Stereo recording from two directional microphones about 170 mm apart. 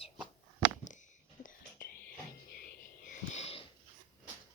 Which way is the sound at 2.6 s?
45° left (ahead or behind).